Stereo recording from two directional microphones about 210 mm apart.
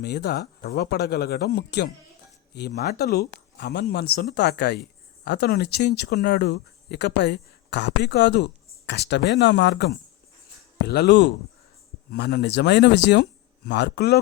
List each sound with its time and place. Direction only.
0.0 s a man's voice: 50° left (ahead or behind)